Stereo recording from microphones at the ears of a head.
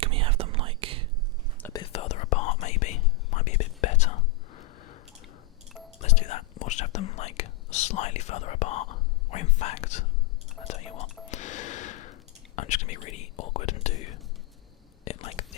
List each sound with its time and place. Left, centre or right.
0.0 s whispering: right
1.6 s whispering: left
6.0 s whispering: left